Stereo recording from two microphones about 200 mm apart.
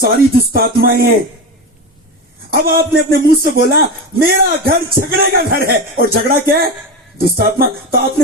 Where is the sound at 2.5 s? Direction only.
45° right (ahead or behind).